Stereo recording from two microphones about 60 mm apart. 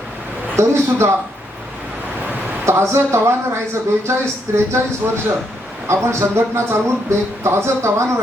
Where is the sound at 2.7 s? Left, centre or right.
Right.